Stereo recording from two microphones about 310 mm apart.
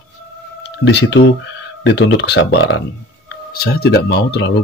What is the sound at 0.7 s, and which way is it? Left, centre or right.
Speech, left.